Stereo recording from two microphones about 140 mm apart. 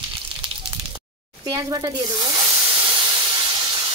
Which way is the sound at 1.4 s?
25° right (ahead or behind).